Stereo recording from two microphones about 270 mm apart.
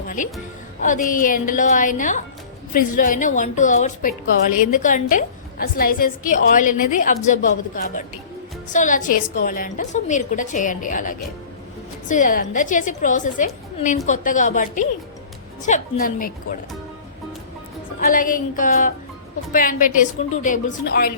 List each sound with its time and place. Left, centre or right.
0.8 s a woman's voice: left
18.0 s a woman's voice: left